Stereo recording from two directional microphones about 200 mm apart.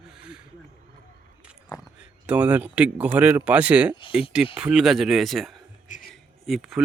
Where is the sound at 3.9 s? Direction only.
25° left (ahead or behind).